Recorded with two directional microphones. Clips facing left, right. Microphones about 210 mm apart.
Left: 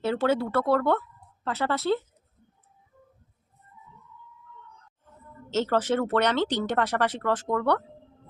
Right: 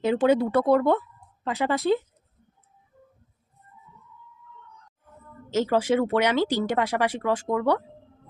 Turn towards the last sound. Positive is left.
turn(degrees=-10)  # may be behind; listen again after turning